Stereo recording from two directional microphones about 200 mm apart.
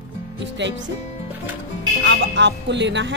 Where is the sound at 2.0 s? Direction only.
60° right (ahead or behind).